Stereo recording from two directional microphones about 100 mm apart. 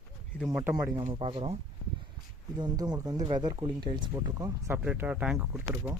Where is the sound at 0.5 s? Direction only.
10° right (ahead or behind).